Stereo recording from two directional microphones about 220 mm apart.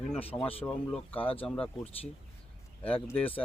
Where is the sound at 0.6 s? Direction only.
5° left (ahead or behind).